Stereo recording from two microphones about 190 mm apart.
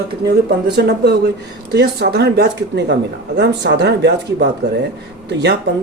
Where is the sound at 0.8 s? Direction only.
60° right (ahead or behind).